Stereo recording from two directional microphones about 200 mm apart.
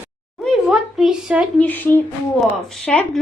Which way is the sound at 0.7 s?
5° right (ahead or behind).